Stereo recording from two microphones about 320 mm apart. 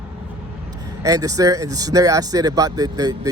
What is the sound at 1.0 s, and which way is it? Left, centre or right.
Speech, centre.